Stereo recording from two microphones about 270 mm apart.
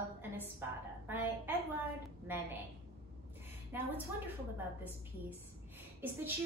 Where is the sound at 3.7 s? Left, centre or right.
Centre.